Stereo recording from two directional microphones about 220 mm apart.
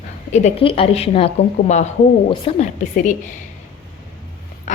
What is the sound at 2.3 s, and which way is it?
Speech, 30° left (ahead or behind).